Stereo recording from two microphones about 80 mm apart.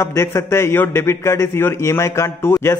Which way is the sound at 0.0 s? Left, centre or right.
Left.